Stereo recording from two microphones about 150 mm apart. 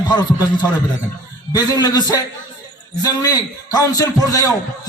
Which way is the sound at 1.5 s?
25° left (ahead or behind).